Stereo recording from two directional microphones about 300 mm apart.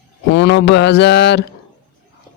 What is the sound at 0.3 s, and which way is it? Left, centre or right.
Speech, left.